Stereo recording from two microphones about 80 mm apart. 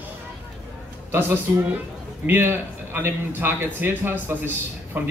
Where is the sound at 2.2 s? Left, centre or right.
Right.